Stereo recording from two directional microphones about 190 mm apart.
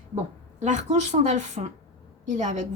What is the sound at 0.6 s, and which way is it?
A woman's voice, 35° right (ahead or behind).